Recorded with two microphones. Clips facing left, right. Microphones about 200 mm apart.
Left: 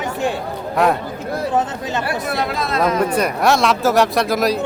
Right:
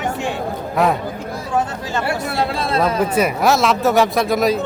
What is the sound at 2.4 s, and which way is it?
Speech, 30° right (ahead or behind).